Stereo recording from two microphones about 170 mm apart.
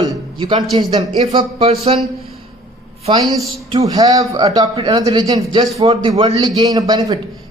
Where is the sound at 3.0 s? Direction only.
30° right (ahead or behind).